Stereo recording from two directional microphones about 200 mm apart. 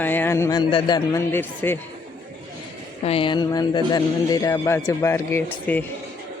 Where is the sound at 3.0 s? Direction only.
25° left (ahead or behind); by 5.8 s 10° left (ahead or behind).